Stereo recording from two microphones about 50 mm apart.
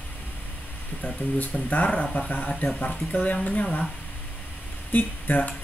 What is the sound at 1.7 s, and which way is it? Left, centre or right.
Speech, left.